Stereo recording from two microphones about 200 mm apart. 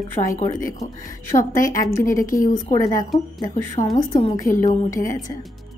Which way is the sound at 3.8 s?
35° left (ahead or behind).